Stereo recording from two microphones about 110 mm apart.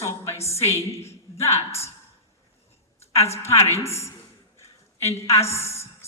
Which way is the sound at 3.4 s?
25° left (ahead or behind).